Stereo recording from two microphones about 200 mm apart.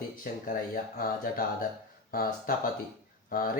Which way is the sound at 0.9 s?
45° left (ahead or behind).